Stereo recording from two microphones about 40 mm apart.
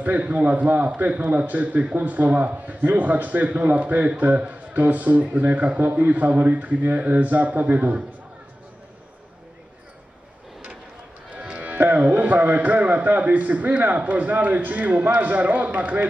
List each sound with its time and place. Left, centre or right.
0.0 s a man's voice: right
11.3 s music: right
12.0 s a man's voice: right